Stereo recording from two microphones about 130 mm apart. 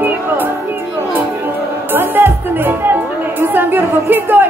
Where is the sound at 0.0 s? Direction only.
15° right (ahead or behind).